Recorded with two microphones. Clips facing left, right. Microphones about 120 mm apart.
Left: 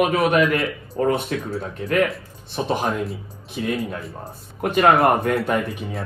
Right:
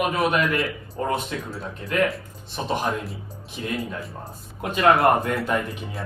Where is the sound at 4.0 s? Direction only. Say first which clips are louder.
Left 1 dB; centre (ahead or behind).